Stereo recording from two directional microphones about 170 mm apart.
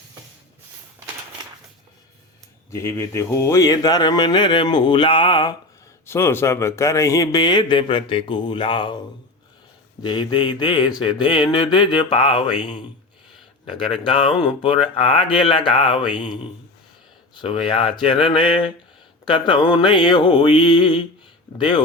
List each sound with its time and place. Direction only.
2.6 s speech: 15° left (ahead or behind)
6.1 s speech: 15° left (ahead or behind)
10.0 s speech: 25° left (ahead or behind)